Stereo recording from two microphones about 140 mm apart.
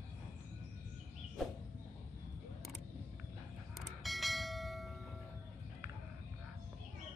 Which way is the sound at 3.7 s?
Centre (ahead or behind).